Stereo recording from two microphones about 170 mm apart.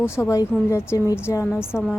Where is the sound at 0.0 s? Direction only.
15° left (ahead or behind).